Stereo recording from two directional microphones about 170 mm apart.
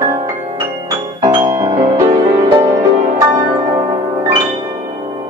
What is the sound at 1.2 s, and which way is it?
Piano, 20° right (ahead or behind).